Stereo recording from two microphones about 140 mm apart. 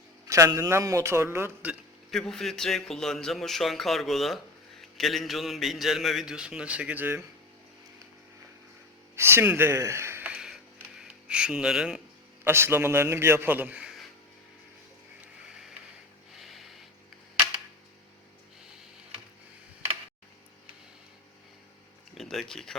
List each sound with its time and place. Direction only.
0.3 s a man's voice: 20° right (ahead or behind)
2.0 s a man's voice: centre (ahead or behind)
9.1 s a man's voice: 15° right (ahead or behind)
12.5 s a man's voice: 15° right (ahead or behind)
16.4 s a sound: centre (ahead or behind)
22.2 s a sound: centre (ahead or behind)